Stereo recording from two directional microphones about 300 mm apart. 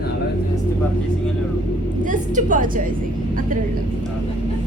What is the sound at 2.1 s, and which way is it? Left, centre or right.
Speech, right.